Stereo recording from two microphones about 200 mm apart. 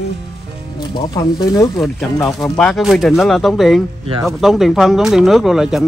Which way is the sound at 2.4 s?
Centre (ahead or behind).